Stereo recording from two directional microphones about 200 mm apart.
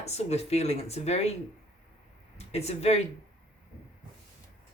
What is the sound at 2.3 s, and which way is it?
Speech, 30° left (ahead or behind).